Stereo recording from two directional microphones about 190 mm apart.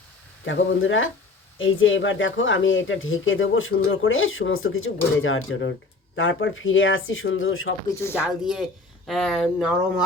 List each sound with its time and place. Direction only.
0.4 s speech: 85° left
8.2 s speech: 5° right (ahead or behind)